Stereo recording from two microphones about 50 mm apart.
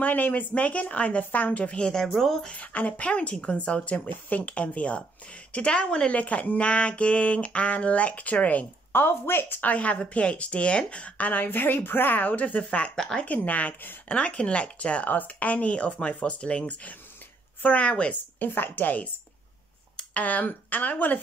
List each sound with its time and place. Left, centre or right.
0.0 s speech: left; by 2.3 s centre
2.5 s speech: left
8.9 s a woman's voice: left
9.6 s speech: left
12.9 s a woman's voice: centre
13.2 s speech: left
18.4 s speech: left